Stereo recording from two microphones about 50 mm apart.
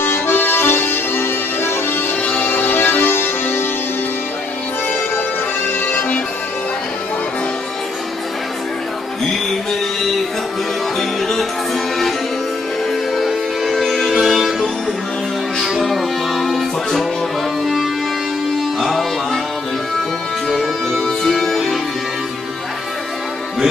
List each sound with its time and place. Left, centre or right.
0.0 s accordion: left
2.2 s music: left
2.5 s music: left
5.8 s music: left
9.5 s music: centre
13.1 s music: centre
18.8 s music: centre
20.5 s music: centre